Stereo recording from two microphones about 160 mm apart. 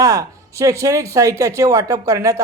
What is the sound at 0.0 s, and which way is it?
Speech, 20° right (ahead or behind).